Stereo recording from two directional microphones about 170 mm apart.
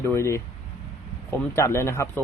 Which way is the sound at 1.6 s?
15° left (ahead or behind).